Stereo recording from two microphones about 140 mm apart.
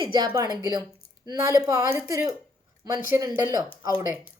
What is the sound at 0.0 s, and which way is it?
A woman's voice, 35° right (ahead or behind).